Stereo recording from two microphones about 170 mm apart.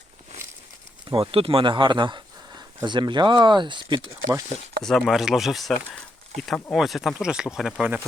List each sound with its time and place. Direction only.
1.1 s speech: 30° right (ahead or behind)
4.8 s speech: centre (ahead or behind)